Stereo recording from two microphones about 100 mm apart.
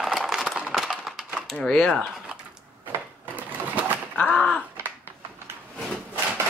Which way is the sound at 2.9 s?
20° right (ahead or behind).